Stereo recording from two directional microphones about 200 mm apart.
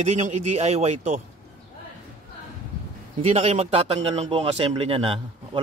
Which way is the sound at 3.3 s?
35° right (ahead or behind).